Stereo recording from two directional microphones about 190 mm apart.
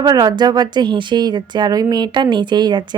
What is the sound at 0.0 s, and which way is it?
A woman's voice, 20° right (ahead or behind).